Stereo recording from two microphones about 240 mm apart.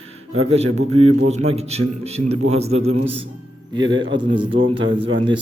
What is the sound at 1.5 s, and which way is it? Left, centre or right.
A man's voice, right.